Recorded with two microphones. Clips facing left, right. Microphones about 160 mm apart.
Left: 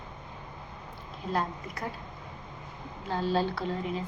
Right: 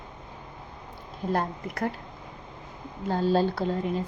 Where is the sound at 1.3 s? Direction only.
55° right (ahead or behind).